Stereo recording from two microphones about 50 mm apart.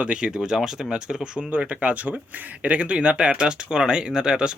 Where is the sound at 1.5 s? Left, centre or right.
Right.